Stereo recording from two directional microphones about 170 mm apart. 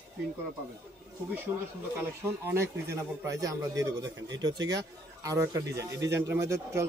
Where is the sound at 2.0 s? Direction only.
15° right (ahead or behind).